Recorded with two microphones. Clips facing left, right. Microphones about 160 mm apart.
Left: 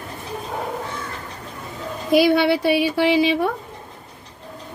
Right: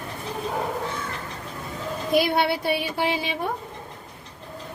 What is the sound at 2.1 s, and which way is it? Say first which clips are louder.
A woman's voice: left 6 dB; 90° left.